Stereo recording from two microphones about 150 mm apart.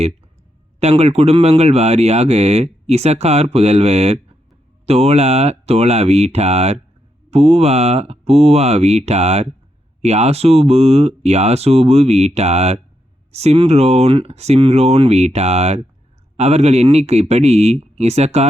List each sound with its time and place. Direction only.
0.8 s speech: 45° right (ahead or behind)